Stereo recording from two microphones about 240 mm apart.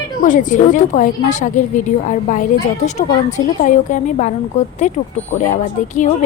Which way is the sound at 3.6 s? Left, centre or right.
Left.